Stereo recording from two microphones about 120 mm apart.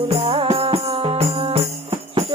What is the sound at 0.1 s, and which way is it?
Music, 60° right (ahead or behind).